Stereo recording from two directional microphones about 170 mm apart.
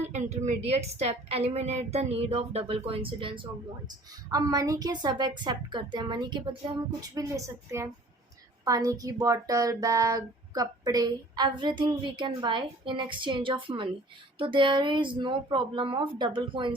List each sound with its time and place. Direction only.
0.1 s a woman's voice: 45° right (ahead or behind); by 16.7 s 30° right (ahead or behind)